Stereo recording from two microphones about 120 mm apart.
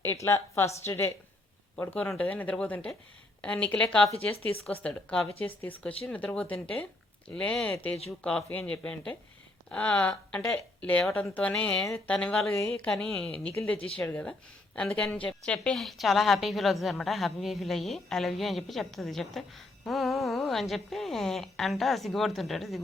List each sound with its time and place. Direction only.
0.0 s a woman's voice: 20° left (ahead or behind); by 22.8 s centre (ahead or behind)